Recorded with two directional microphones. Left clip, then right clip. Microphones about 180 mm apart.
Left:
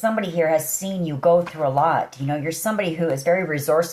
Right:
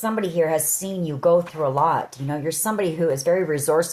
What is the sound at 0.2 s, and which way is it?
Speech, 45° right (ahead or behind).